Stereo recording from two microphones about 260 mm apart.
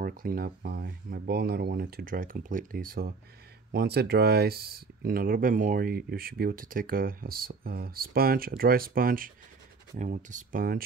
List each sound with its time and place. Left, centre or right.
0.0 s speech: right